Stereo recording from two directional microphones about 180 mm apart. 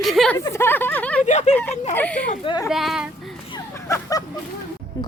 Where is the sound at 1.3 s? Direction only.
40° left (ahead or behind).